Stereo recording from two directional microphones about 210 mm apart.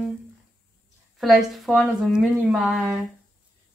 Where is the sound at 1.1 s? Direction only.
Centre (ahead or behind).